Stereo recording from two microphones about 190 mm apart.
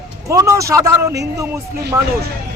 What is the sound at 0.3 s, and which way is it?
A man's voice, 15° right (ahead or behind).